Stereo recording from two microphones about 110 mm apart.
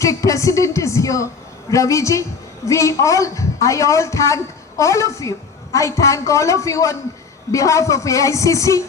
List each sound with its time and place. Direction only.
0.0 s a woman's voice: 30° left (ahead or behind)